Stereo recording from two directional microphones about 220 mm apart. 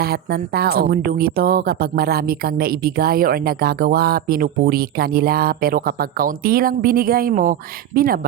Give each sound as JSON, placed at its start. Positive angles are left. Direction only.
{"t": 0.0, "sound": "speech", "side_deg": -45}